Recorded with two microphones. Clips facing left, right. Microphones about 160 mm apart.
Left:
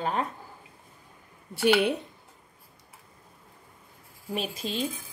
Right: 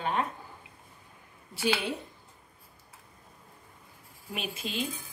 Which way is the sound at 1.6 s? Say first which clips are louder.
Left 7 dB; 65° left (ahead or behind).